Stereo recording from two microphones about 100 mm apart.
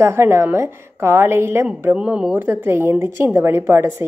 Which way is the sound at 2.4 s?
20° right (ahead or behind).